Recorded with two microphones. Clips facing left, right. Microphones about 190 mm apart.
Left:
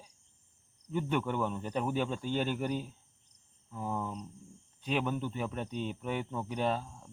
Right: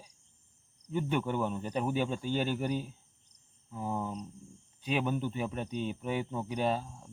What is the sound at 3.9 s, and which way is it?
Speech, 20° right (ahead or behind).